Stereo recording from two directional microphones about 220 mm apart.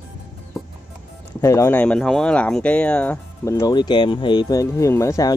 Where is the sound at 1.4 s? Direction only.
15° left (ahead or behind).